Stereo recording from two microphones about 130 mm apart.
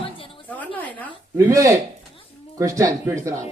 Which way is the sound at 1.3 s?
25° right (ahead or behind).